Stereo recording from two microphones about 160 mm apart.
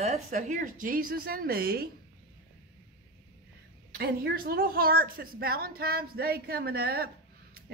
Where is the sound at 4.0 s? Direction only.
70° right (ahead or behind).